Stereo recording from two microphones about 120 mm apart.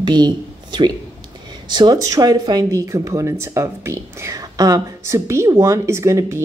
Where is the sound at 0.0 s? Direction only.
40° right (ahead or behind).